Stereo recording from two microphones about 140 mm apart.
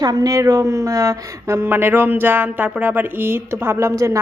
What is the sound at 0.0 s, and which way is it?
A woman's voice, 30° right (ahead or behind).